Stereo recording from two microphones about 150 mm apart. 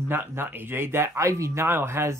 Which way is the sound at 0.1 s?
15° right (ahead or behind).